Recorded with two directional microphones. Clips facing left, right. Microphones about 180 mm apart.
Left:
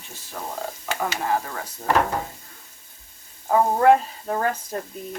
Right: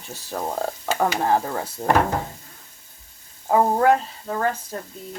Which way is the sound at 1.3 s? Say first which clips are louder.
Right 4 dB; 30° right (ahead or behind).